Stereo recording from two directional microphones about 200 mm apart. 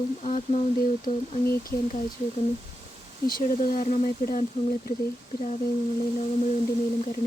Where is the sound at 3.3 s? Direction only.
45° left (ahead or behind).